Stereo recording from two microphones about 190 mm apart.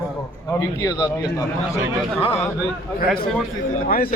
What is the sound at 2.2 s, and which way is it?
Speech, 30° left (ahead or behind).